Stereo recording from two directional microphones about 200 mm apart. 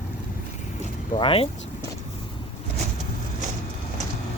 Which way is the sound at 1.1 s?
30° left (ahead or behind).